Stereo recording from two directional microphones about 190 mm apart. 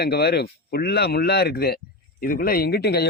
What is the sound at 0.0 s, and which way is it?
Speech, 60° left (ahead or behind).